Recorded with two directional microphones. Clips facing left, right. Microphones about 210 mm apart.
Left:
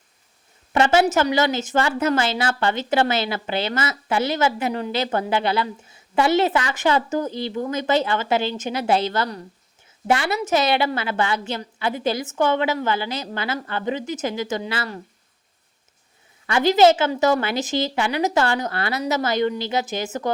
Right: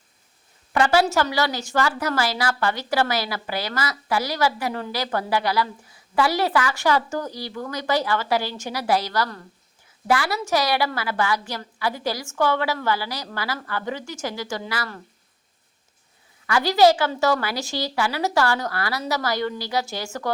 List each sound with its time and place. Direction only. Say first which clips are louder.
0.7 s a woman's voice: left 2 dB; 25° left (ahead or behind)
16.5 s a woman's voice: left 2 dB; 20° left (ahead or behind)